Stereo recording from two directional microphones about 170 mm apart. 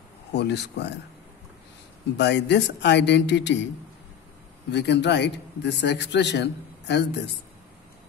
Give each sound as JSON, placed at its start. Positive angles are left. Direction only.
{"t": 0.3, "sound": "speech", "side_deg": 80}
{"t": 2.1, "sound": "speech", "side_deg": 90}
{"t": 4.6, "sound": "speech", "side_deg": 90}